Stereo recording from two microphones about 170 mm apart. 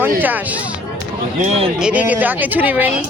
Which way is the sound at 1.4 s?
40° right (ahead or behind).